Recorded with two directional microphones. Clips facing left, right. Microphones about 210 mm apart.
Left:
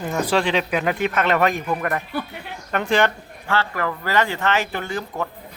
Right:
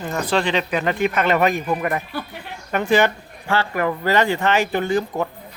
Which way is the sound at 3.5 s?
15° right (ahead or behind).